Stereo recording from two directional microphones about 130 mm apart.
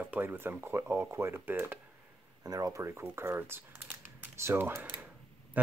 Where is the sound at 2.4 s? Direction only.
30° right (ahead or behind).